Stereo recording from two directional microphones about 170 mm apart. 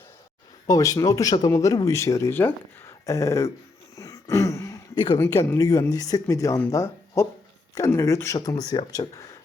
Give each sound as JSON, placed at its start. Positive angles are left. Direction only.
{"t": 0.7, "sound": "speech", "side_deg": 20}